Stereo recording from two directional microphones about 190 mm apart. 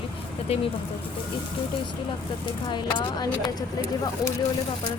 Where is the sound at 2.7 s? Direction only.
20° left (ahead or behind).